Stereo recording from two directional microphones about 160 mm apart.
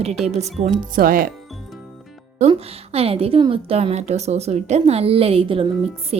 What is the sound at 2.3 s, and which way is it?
A woman's voice, 40° right (ahead or behind).